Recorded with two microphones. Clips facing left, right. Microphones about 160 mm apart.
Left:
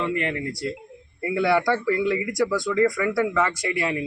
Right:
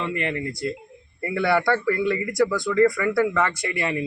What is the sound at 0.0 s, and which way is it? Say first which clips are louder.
A man's voice: left 1 dB; 5° left (ahead or behind).